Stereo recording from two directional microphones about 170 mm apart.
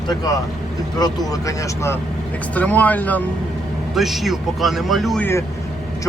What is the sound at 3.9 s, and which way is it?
Speech, centre (ahead or behind).